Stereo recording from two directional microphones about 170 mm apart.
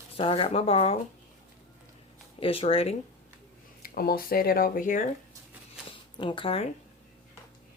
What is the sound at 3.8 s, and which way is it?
Speech, 60° left (ahead or behind).